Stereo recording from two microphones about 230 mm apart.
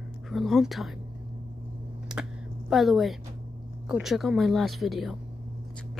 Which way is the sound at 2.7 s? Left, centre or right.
Centre.